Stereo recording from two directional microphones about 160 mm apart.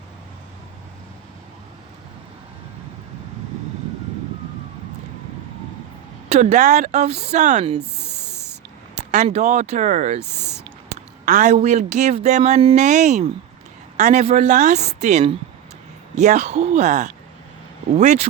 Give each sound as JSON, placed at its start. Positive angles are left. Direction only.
{"t": 6.2, "sound": "a woman's voice", "side_deg": -45}
{"t": 7.9, "sound": "snake", "side_deg": -90}
{"t": 9.0, "sound": "a woman's voice", "side_deg": -45}
{"t": 10.3, "sound": "speech", "side_deg": 15}
{"t": 10.6, "sound": "a woman's voice", "side_deg": -50}